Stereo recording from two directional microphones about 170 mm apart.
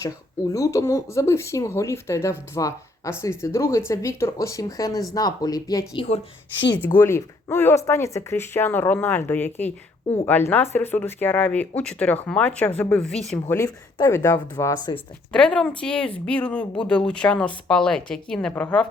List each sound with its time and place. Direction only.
0.5 s speech: 20° left (ahead or behind)
6.0 s speech: 35° left (ahead or behind)
6.7 s speech: 10° left (ahead or behind)
15.5 s speech: 5° left (ahead or behind)